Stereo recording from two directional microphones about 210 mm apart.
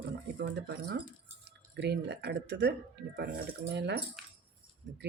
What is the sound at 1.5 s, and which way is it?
Speech, 55° right (ahead or behind).